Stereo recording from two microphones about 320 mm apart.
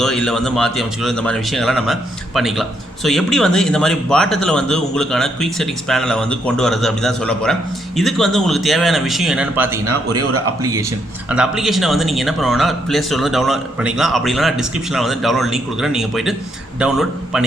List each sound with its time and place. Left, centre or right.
0.0 s a man's voice: centre
9.8 s speech: right
10.6 s a man's voice: centre